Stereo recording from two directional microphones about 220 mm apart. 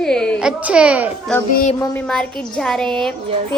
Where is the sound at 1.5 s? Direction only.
35° left (ahead or behind).